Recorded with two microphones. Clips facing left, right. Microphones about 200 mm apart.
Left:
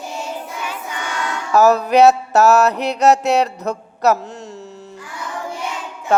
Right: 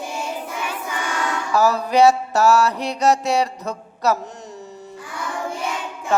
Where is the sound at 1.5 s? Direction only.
65° left (ahead or behind).